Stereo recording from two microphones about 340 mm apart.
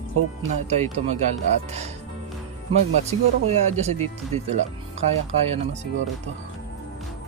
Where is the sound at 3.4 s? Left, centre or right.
Centre.